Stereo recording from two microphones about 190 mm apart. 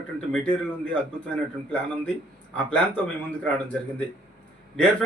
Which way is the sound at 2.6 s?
5° left (ahead or behind).